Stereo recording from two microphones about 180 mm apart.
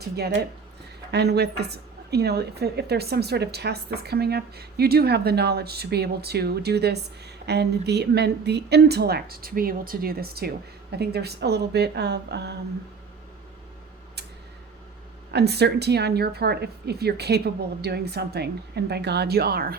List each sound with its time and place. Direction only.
1.1 s a woman's voice: 65° right (ahead or behind)
15.3 s a woman's voice: 65° right (ahead or behind)